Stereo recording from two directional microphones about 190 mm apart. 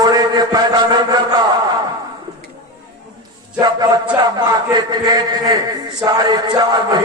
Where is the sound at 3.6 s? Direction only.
20° right (ahead or behind).